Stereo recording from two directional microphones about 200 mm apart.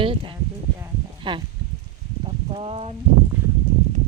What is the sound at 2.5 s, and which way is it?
Speech, 30° right (ahead or behind).